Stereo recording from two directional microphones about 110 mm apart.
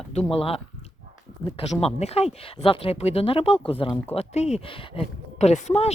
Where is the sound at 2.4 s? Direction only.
60° left (ahead or behind).